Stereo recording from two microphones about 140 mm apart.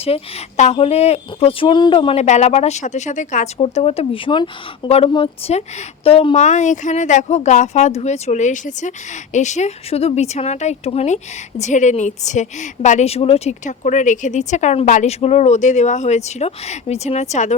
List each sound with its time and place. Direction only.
0.0 s a woman's voice: 50° left (ahead or behind)
2.1 s a woman's voice: 55° left (ahead or behind)